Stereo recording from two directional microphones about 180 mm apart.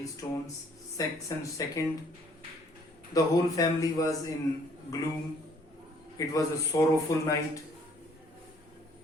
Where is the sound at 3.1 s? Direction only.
20° left (ahead or behind).